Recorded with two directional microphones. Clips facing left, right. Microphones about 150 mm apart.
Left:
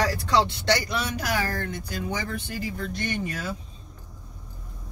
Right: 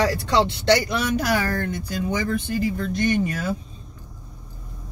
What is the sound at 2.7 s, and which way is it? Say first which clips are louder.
Speech: right 7 dB; 50° right (ahead or behind).